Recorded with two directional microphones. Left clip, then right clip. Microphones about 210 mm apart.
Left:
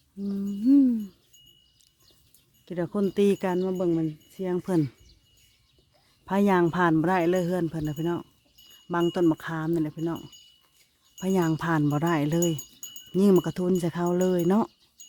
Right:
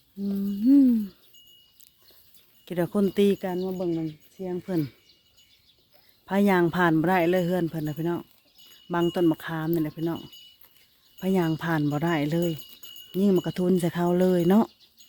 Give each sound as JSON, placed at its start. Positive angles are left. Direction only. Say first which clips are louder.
{"t": 0.7, "sound": "a sound", "louder": "right 1 dB", "side_deg": 0}
{"t": 2.6, "sound": "speech", "louder": "right 2 dB", "side_deg": -5}
{"t": 3.3, "sound": "speech", "louder": "left 3 dB", "side_deg": 20}
{"t": 6.2, "sound": "speech", "louder": "even", "side_deg": 5}
{"t": 13.1, "sound": "wind chime", "louder": "left 3 dB", "side_deg": 10}
{"t": 13.5, "sound": "speech", "louder": "right 2 dB", "side_deg": 0}